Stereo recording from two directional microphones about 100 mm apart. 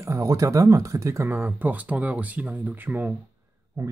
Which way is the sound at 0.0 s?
35° right (ahead or behind).